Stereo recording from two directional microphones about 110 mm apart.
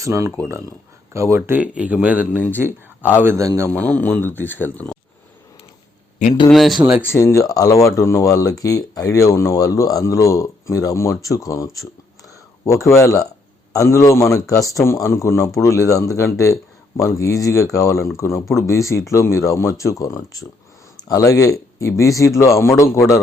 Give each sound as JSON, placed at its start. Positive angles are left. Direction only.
{"t": 0.0, "sound": "a man's voice", "side_deg": -25}
{"t": 3.7, "sound": "speech", "side_deg": 10}
{"t": 6.5, "sound": "speech", "side_deg": 0}
{"t": 7.0, "sound": "speech", "side_deg": 25}